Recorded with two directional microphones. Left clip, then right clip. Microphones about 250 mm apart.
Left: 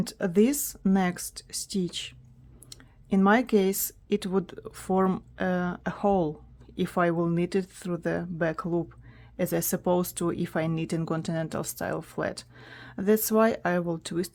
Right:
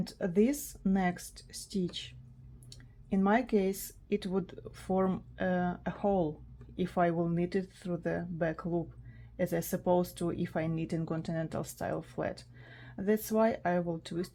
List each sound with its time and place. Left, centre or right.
0.0 s speech: left